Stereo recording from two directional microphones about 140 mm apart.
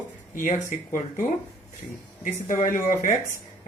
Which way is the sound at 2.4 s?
65° left (ahead or behind).